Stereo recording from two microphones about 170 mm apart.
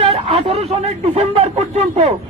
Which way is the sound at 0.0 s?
35° right (ahead or behind).